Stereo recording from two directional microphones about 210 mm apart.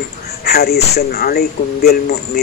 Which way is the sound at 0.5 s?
50° left (ahead or behind).